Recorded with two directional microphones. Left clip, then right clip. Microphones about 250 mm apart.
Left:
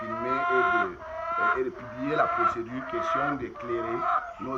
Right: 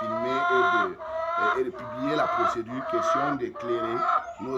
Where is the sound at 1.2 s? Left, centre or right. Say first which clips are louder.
Even; right.